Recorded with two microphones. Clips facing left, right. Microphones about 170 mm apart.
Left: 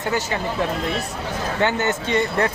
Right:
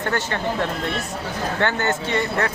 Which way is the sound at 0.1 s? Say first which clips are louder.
Left 1 dB; 5° left (ahead or behind).